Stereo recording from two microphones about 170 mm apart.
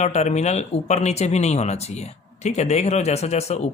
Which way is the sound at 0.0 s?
40° left (ahead or behind).